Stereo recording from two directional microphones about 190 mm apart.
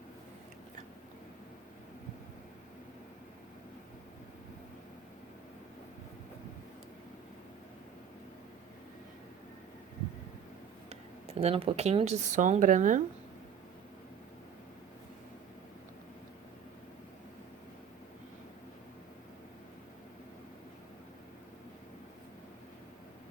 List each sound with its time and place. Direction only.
11.3 s speech: 30° right (ahead or behind)